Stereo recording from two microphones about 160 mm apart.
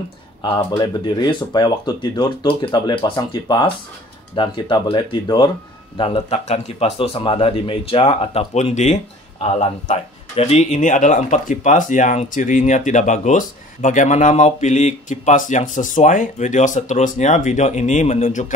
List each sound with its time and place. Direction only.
0.4 s speech: 30° left (ahead or behind); by 18.5 s 50° left (ahead or behind)